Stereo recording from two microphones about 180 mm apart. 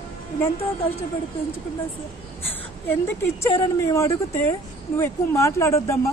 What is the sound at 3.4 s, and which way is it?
Speech, 15° left (ahead or behind).